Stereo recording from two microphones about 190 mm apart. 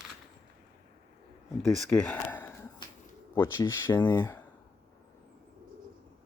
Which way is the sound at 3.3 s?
15° left (ahead or behind).